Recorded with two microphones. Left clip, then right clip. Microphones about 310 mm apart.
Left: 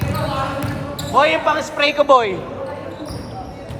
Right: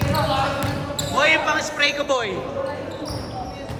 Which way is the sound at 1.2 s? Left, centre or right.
Centre.